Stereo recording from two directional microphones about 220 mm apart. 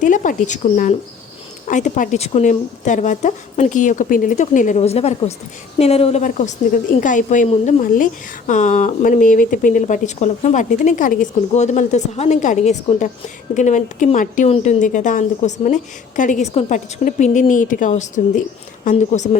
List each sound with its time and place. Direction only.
0.0 s a woman's voice: 35° left (ahead or behind)